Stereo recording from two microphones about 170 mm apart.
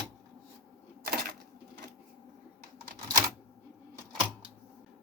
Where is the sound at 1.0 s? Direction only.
65° right (ahead or behind).